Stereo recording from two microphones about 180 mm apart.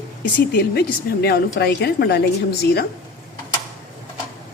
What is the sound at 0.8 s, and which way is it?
A woman's voice, 65° left (ahead or behind).